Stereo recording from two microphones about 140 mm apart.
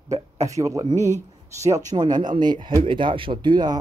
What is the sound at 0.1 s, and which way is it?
Speech, 20° right (ahead or behind).